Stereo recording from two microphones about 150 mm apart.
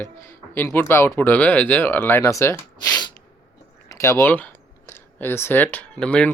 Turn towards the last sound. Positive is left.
turn(degrees=5)  # may be behind; listen again after turning